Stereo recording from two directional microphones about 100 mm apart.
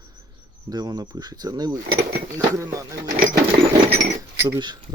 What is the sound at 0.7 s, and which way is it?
Speech, 45° right (ahead or behind).